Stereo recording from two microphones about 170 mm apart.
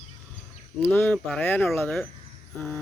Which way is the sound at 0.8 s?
10° left (ahead or behind).